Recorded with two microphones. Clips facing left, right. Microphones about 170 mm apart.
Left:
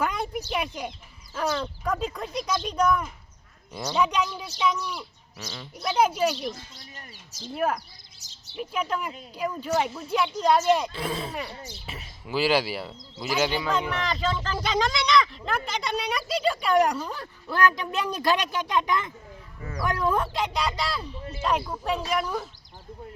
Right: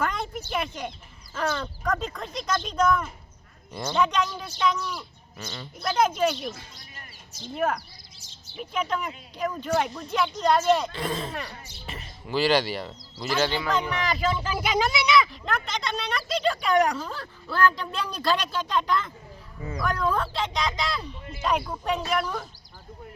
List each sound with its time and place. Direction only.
0.0 s a sound: 10° left (ahead or behind)
0.5 s speech: 10° left (ahead or behind)
7.5 s speech: 5° left (ahead or behind)
21.2 s speech: 35° left (ahead or behind)
21.4 s speech: centre (ahead or behind)